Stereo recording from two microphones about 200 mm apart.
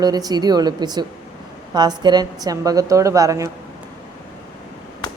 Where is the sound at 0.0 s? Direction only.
20° right (ahead or behind).